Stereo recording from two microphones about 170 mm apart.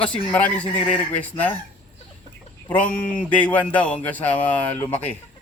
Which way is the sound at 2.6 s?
10° left (ahead or behind).